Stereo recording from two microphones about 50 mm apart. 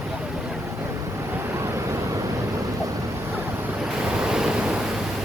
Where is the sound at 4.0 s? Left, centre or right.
Centre.